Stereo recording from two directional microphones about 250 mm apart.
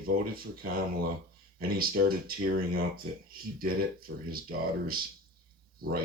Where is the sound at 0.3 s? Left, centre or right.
Right.